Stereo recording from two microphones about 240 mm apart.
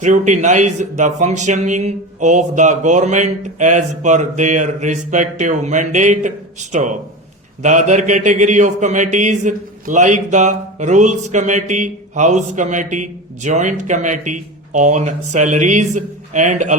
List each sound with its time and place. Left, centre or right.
0.0 s speech: right